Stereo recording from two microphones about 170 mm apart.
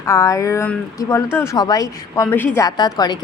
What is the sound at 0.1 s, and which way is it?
A woman's voice, 20° left (ahead or behind).